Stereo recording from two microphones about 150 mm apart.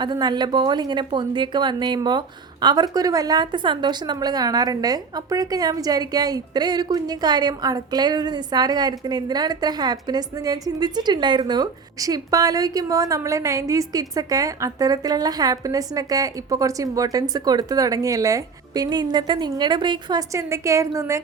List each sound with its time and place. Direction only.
0.0 s a woman's voice: 30° right (ahead or behind)